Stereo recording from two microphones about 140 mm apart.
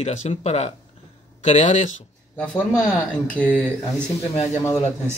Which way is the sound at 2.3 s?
10° left (ahead or behind).